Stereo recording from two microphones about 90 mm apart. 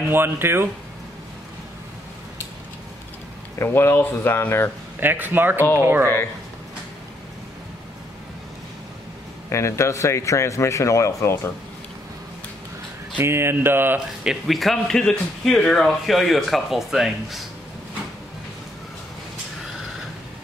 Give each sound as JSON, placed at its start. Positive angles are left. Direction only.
{"t": 0.1, "sound": "speech", "side_deg": -25}
{"t": 3.5, "sound": "speech", "side_deg": 30}
{"t": 5.0, "sound": "speech", "side_deg": -20}
{"t": 9.5, "sound": "speech", "side_deg": 30}
{"t": 13.2, "sound": "speech", "side_deg": -30}
{"t": 13.9, "sound": "speech", "side_deg": -5}